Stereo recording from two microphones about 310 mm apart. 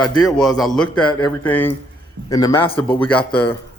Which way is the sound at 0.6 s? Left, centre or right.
Centre.